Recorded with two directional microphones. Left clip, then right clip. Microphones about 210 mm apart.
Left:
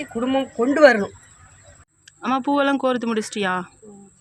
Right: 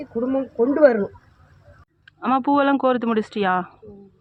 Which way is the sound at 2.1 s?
10° left (ahead or behind).